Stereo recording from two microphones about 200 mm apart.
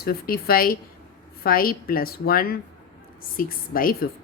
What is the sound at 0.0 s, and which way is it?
A woman's voice, 50° left (ahead or behind).